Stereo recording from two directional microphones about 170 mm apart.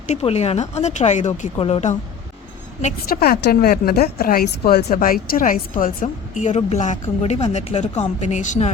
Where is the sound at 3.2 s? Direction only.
65° left (ahead or behind).